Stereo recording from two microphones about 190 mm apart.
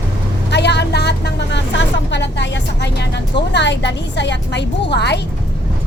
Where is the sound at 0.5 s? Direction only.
65° left (ahead or behind).